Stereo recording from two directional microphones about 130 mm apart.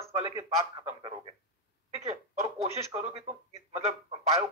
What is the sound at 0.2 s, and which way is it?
A woman's voice, 25° right (ahead or behind).